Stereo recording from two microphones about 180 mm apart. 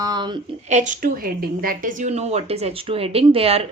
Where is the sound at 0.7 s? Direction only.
45° right (ahead or behind).